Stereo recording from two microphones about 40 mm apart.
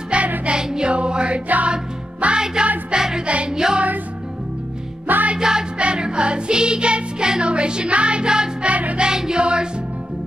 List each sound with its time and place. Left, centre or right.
0.1 s music: right
2.9 s music: centre
5.0 s music: right
5.4 s music: centre
8.6 s music: right
9.0 s music: centre